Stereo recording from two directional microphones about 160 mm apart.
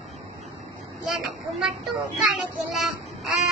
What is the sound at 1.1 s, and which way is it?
Speech, centre (ahead or behind).